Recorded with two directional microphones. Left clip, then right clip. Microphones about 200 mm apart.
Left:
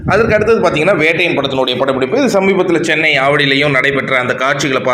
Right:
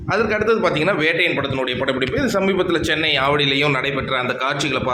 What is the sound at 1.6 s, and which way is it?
Speech, 20° right (ahead or behind).